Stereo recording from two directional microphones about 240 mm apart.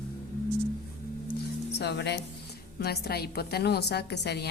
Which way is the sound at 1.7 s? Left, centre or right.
Left.